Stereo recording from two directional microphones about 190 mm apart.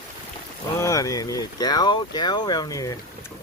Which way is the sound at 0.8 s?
15° left (ahead or behind).